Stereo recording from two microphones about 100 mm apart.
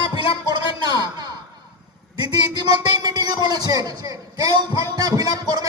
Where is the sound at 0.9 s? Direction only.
45° right (ahead or behind).